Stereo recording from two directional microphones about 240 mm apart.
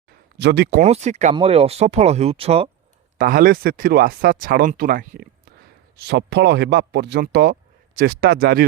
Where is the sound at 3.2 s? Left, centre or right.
Right.